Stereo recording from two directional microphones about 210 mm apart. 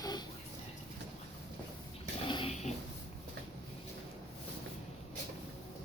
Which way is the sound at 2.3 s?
25° left (ahead or behind).